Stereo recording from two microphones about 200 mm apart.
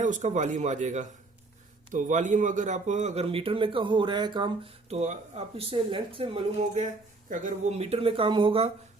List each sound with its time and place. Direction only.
0.0 s a man's voice: 35° right (ahead or behind)